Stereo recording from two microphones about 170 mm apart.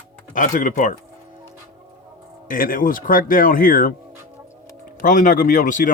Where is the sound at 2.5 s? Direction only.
55° left (ahead or behind).